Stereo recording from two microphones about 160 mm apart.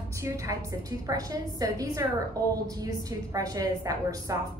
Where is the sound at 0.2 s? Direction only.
20° right (ahead or behind).